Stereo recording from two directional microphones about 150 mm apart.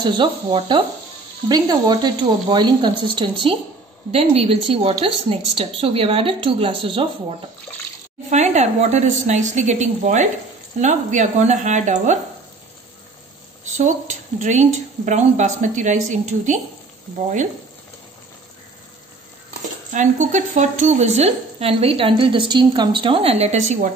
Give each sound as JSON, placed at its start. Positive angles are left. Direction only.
{"t": 0.0, "sound": "a woman's voice", "side_deg": -35}
{"t": 8.3, "sound": "speech", "side_deg": -50}
{"t": 13.7, "sound": "speech", "side_deg": -50}
{"t": 19.9, "sound": "speech", "side_deg": -55}